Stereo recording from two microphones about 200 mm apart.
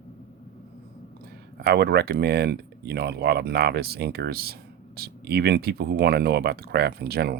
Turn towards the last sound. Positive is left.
turn(degrees=-50)  # may be behind; listen again after turning